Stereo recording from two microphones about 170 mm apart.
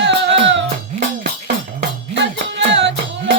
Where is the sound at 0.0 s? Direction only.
90° right.